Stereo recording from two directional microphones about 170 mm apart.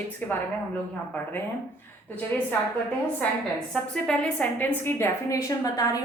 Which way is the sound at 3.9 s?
5° left (ahead or behind).